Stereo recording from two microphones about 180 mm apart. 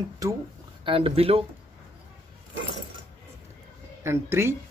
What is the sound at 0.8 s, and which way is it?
Speech, 30° right (ahead or behind).